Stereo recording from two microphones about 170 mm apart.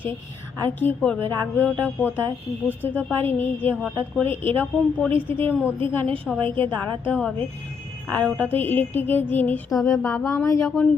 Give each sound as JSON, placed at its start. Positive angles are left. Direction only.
{"t": 0.6, "sound": "a woman's voice", "side_deg": 10}